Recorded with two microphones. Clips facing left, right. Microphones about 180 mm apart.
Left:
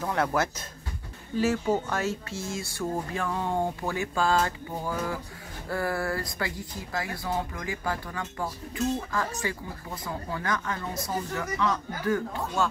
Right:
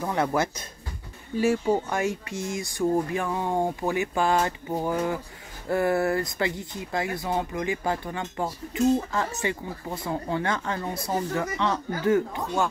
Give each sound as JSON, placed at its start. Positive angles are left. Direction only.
{"t": 0.0, "sound": "speech", "side_deg": -10}